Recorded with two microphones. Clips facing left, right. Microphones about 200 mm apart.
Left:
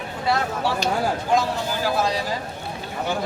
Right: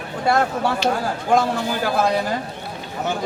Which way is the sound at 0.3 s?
50° right (ahead or behind).